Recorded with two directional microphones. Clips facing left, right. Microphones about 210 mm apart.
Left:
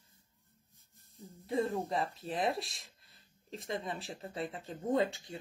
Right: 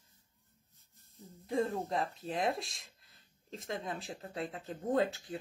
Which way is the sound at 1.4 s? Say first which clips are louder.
Even; centre (ahead or behind).